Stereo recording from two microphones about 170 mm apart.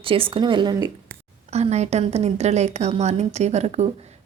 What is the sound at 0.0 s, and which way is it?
Speech, 30° right (ahead or behind).